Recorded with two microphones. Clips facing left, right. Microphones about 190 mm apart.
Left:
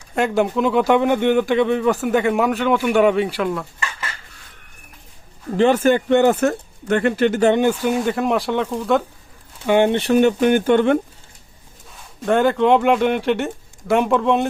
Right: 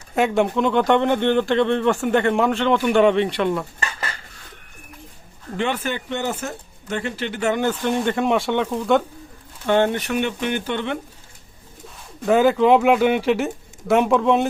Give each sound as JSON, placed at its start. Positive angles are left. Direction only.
{"t": 0.2, "sound": "speech", "side_deg": 0}
{"t": 5.5, "sound": "speech", "side_deg": 40}
{"t": 7.6, "sound": "speech", "side_deg": 10}
{"t": 9.6, "sound": "speech", "side_deg": 15}
{"t": 9.9, "sound": "speech", "side_deg": 30}
{"t": 12.2, "sound": "speech", "side_deg": 0}